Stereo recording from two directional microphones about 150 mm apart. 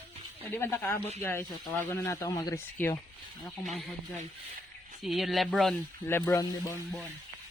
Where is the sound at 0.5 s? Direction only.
15° left (ahead or behind).